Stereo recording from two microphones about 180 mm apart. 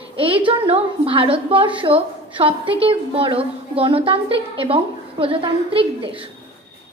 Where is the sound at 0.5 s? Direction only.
30° right (ahead or behind).